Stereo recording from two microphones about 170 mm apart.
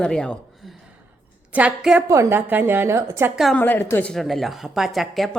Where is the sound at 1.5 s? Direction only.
5° right (ahead or behind).